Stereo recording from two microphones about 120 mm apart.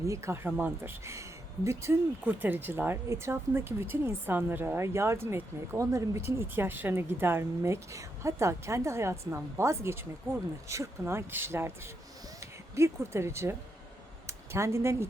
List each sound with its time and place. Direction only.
0.0 s speech: 25° right (ahead or behind)